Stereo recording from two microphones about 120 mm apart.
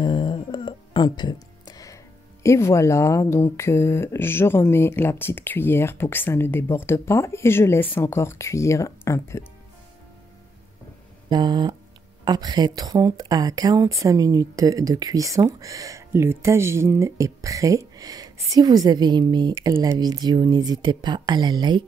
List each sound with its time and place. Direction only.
0.0 s music: 40° left (ahead or behind)
2.4 s speech: 25° left (ahead or behind)
11.2 s a woman's voice: 35° right (ahead or behind)